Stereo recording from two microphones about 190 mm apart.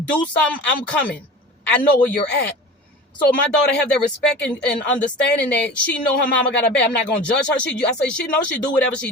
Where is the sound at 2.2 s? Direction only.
60° left (ahead or behind).